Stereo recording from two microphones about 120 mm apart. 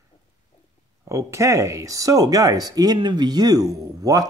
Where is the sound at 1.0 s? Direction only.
25° right (ahead or behind).